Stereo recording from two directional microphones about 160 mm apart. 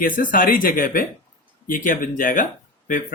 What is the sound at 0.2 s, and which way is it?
Speech, 60° left (ahead or behind).